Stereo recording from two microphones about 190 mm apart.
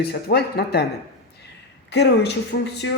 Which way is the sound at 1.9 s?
65° left (ahead or behind).